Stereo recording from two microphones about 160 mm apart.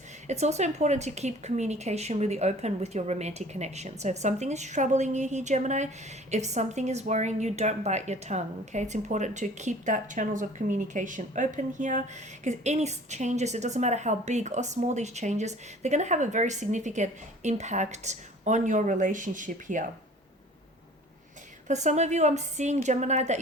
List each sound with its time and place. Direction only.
0.3 s a woman's voice: 45° right (ahead or behind)
21.7 s a woman's voice: 45° right (ahead or behind)